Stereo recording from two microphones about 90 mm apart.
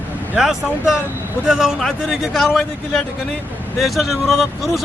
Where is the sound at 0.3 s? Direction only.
Centre (ahead or behind).